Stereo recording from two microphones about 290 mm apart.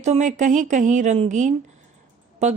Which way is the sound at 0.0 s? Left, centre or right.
Right.